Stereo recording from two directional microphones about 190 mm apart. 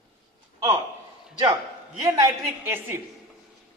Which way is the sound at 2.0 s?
15° right (ahead or behind).